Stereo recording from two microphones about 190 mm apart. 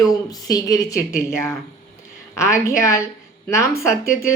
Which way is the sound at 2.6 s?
15° left (ahead or behind).